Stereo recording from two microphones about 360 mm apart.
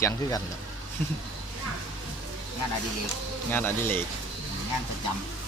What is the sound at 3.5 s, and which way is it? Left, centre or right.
Speech, centre.